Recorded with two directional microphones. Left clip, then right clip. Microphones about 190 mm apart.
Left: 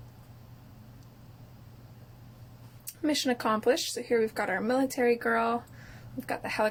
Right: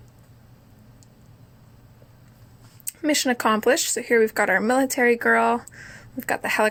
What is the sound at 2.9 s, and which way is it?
Speech, 45° right (ahead or behind).